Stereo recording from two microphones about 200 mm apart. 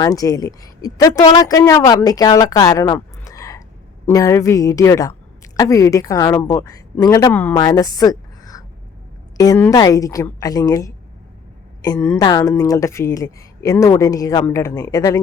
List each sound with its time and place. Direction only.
0.0 s a woman's voice: 20° left (ahead or behind)
12.2 s a woman's voice: 20° left (ahead or behind)